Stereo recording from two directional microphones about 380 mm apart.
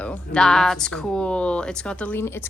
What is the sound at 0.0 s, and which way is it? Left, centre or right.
Speech, centre.